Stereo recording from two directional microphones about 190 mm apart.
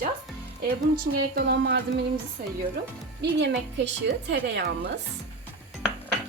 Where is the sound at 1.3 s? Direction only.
60° right (ahead or behind).